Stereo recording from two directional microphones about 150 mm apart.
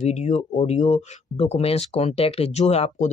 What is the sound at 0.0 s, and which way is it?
Speech, 50° left (ahead or behind).